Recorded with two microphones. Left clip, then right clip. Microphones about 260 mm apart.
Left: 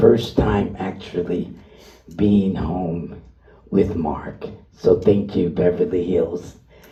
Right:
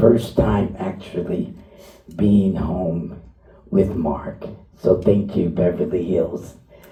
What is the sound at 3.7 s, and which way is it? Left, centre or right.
Speech, left.